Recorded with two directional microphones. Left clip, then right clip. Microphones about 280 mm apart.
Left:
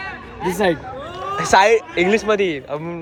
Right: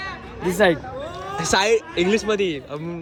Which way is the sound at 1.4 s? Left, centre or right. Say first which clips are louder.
Left 6 dB; centre.